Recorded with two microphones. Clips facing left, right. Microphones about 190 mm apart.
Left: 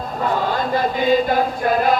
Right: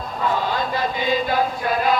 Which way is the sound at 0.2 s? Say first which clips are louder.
Left 2 dB; 45° left (ahead or behind).